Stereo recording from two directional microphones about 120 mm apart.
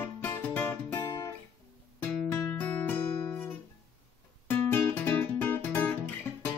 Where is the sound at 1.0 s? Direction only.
30° left (ahead or behind).